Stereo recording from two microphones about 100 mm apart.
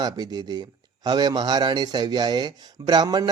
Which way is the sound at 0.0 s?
45° right (ahead or behind).